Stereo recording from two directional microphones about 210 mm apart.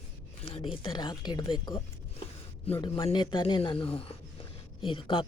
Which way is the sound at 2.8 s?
20° left (ahead or behind).